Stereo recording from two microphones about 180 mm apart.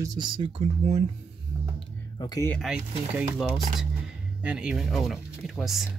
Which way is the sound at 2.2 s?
20° left (ahead or behind).